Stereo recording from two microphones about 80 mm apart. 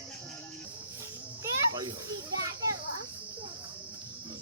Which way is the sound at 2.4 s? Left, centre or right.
Right.